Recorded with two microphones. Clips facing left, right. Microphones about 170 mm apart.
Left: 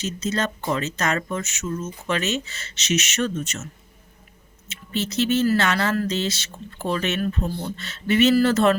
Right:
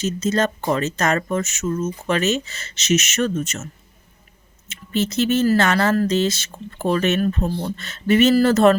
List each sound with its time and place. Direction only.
0.0 s speech: 45° right (ahead or behind)
4.7 s speech: 45° right (ahead or behind)